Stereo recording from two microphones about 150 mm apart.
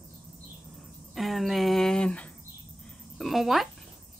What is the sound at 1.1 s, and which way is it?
Speech, centre (ahead or behind).